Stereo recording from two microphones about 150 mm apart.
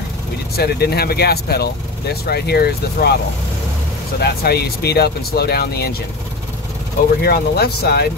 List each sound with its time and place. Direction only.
0.6 s speech: 90° left
4.2 s speech: 90° left
7.2 s speech: 90° left